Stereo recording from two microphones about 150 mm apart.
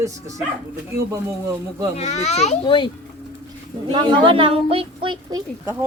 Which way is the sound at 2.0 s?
50° left (ahead or behind).